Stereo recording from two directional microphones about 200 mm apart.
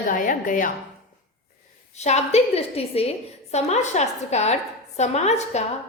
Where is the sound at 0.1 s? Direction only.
45° left (ahead or behind).